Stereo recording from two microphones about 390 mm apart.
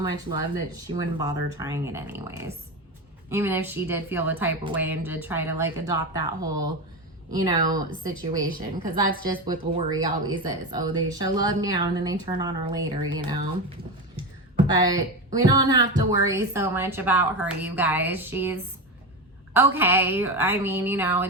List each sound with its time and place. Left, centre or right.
0.0 s speech: centre
8.5 s a woman's voice: right
14.7 s speech: centre